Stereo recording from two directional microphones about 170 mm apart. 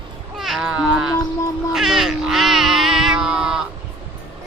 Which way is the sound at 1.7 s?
Centre (ahead or behind).